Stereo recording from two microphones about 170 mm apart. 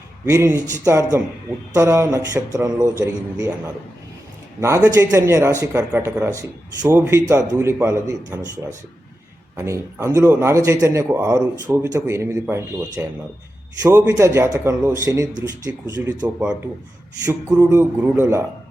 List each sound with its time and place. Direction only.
0.3 s a man's voice: 15° right (ahead or behind)
4.6 s a man's voice: 15° right (ahead or behind)
17.5 s a man's voice: 10° right (ahead or behind)